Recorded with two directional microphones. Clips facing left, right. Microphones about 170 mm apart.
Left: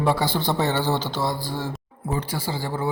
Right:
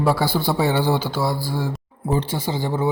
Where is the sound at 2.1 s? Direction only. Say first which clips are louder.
Right 5 dB; 25° right (ahead or behind).